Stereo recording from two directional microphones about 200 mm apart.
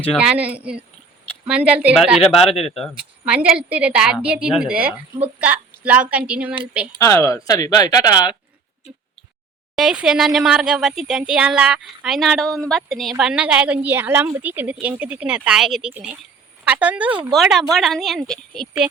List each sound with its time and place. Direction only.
0.1 s a woman's voice: 5° right (ahead or behind)
7.0 s speech: 15° left (ahead or behind)
9.7 s a woman's voice: 5° right (ahead or behind)